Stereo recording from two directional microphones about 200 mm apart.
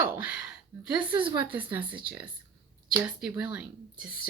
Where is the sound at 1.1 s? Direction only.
25° right (ahead or behind).